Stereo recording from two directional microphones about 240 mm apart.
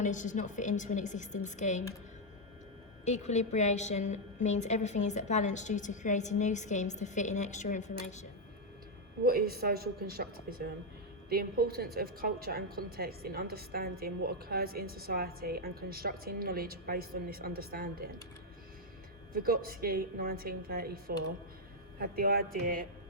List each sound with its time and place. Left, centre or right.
0.0 s a woman's voice: left
3.0 s a woman's voice: left
9.2 s a woman's voice: right
19.3 s a woman's voice: right